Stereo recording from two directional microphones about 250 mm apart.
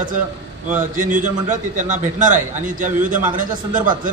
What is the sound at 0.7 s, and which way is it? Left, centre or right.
A man's voice, right.